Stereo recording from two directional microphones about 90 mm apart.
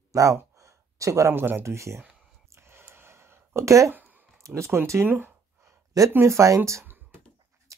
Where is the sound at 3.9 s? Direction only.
20° right (ahead or behind).